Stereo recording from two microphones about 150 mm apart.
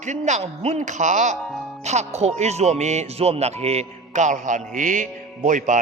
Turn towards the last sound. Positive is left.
turn(degrees=-55)  # may be behind; listen again after turning